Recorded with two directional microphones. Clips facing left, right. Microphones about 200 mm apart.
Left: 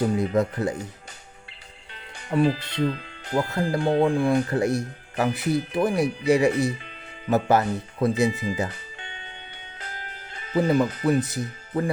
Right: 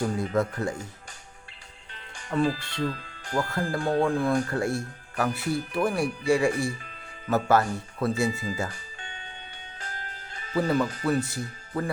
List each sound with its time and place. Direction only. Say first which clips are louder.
0.0 s speech: left 4 dB; 20° left (ahead or behind)
2.4 s speech: left 4 dB; 20° left (ahead or behind)
9.7 s music: left 2 dB; 40° right (ahead or behind)
10.5 s speech: left 4 dB; 20° left (ahead or behind)